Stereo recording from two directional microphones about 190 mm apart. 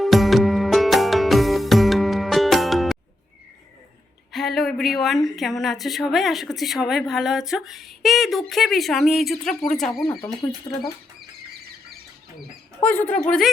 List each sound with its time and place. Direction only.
0.0 s music: centre (ahead or behind)
4.3 s speech: centre (ahead or behind)
10.7 s speech: 15° left (ahead or behind)
12.8 s speech: 10° left (ahead or behind)